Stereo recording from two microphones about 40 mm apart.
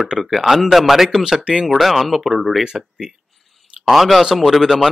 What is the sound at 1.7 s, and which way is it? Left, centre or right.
Speech, centre.